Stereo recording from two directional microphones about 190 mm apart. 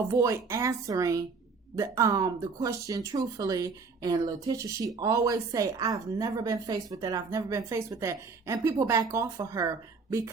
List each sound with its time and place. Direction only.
0.1 s a woman's voice: 15° right (ahead or behind)